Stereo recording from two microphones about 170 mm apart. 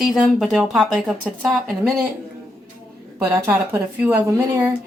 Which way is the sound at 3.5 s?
10° right (ahead or behind).